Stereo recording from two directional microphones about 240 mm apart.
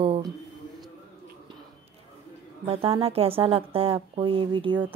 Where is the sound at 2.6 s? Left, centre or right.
Right.